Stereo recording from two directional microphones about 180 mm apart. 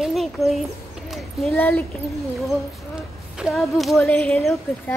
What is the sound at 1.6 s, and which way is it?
Speech, 15° left (ahead or behind).